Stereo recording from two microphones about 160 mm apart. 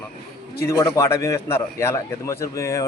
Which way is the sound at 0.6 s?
20° left (ahead or behind).